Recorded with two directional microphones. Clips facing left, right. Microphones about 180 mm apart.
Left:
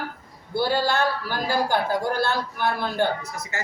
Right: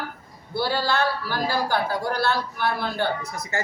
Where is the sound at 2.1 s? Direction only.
50° left (ahead or behind).